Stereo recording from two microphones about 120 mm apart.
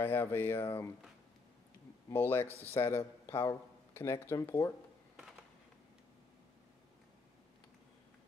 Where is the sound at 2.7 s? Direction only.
25° left (ahead or behind).